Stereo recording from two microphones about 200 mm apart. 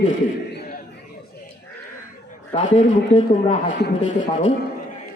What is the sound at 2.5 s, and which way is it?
Speech, 35° left (ahead or behind).